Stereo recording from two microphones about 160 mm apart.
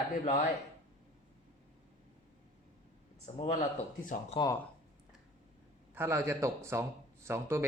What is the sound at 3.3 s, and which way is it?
Speech, 45° left (ahead or behind).